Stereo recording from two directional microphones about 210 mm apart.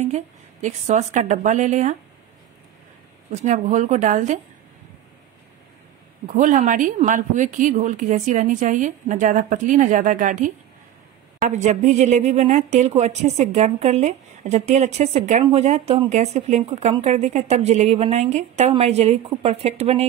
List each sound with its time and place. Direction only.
0.0 s speech: 35° right (ahead or behind)
3.3 s speech: 35° right (ahead or behind)
6.2 s speech: 35° right (ahead or behind)